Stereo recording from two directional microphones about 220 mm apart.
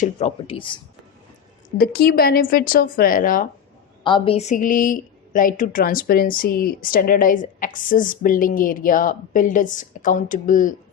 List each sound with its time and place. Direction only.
0.0 s speech: 30° left (ahead or behind)
1.8 s a woman's voice: 45° left (ahead or behind)
4.0 s a woman's voice: 25° left (ahead or behind)